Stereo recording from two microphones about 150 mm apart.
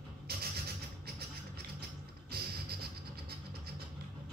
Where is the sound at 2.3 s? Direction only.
90° right.